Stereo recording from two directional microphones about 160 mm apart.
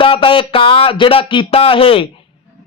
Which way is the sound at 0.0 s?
30° left (ahead or behind).